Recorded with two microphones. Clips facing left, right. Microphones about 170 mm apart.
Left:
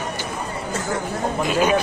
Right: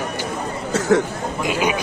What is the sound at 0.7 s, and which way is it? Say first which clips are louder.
Speech: right 10 dB; 85° right.